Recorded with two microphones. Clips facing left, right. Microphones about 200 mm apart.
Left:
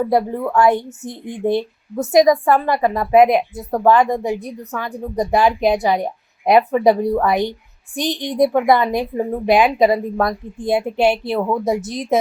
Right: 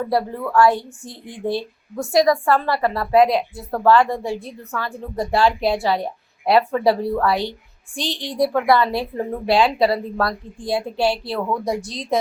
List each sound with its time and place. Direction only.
0.1 s a woman's voice: 20° left (ahead or behind)